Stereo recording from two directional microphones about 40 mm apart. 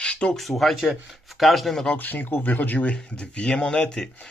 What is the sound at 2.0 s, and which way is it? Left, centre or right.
Speech, left.